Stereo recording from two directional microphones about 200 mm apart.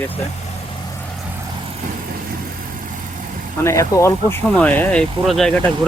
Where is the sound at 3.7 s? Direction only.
15° left (ahead or behind).